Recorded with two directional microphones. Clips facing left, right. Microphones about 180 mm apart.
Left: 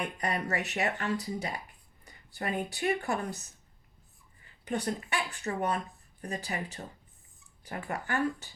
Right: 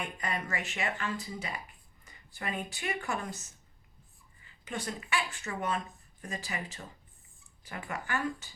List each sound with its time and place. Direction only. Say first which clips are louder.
0.0 s speech: left 4 dB; 40° left (ahead or behind)
4.6 s speech: left 6 dB; 40° left (ahead or behind)